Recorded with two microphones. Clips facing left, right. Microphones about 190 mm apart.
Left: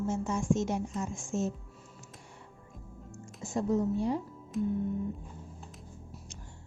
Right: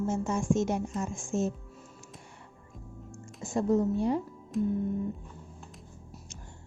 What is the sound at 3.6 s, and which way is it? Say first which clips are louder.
Speech: right 3 dB; 60° right (ahead or behind).